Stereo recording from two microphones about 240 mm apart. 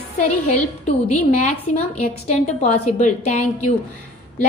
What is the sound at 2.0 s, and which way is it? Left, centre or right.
A woman's voice, left.